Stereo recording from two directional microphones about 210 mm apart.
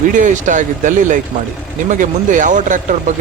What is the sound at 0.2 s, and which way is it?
Speech, 35° right (ahead or behind).